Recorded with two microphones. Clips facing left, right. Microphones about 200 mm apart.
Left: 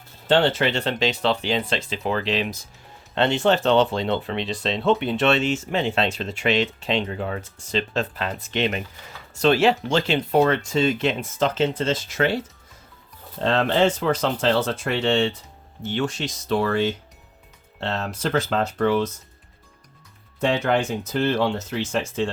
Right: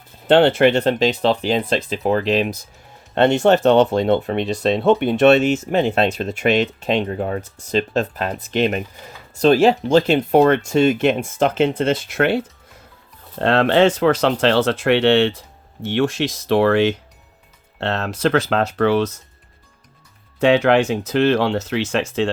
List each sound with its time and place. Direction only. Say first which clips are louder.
0.3 s speech: right 7 dB; 60° right (ahead or behind)
0.8 s speech: right 6 dB; 40° right (ahead or behind)
5.5 s speech: right 6 dB; 40° right (ahead or behind); by 12.4 s 60° right (ahead or behind)
13.4 s speech: right 5 dB; 65° right (ahead or behind)
20.4 s speech: right 7 dB; 75° right (ahead or behind)